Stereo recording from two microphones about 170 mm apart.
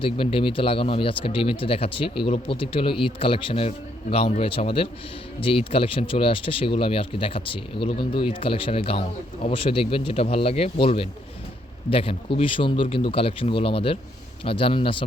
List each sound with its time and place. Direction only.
0.0 s speech: 30° left (ahead or behind)